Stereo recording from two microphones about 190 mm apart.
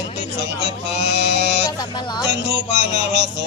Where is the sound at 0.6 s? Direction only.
65° right (ahead or behind).